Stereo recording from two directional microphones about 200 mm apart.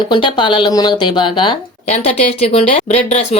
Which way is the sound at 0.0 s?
25° left (ahead or behind).